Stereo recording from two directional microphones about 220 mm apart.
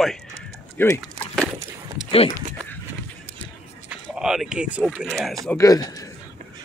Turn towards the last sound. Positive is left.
turn(degrees=15)  # may be behind; listen again after turning